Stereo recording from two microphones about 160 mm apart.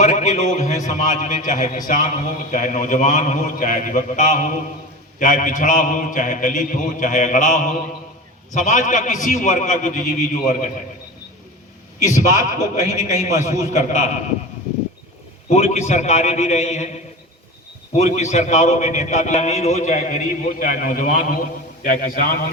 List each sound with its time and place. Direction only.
0.0 s a man's voice: 45° left (ahead or behind)
12.5 s a man's voice: 45° left (ahead or behind)
15.4 s a man's voice: 40° left (ahead or behind); by 22.5 s 65° left (ahead or behind)